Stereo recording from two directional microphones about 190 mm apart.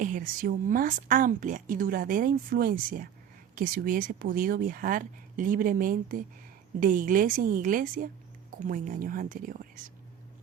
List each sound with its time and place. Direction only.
0.0 s a woman's voice: 45° right (ahead or behind)